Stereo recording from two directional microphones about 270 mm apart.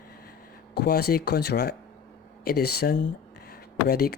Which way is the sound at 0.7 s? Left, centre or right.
Left.